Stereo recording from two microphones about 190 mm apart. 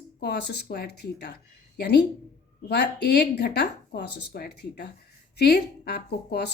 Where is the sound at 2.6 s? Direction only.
60° left (ahead or behind).